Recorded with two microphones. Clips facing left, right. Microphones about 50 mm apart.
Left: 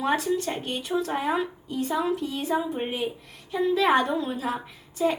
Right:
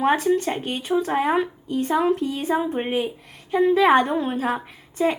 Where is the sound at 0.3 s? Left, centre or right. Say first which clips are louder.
Right 5 dB; right.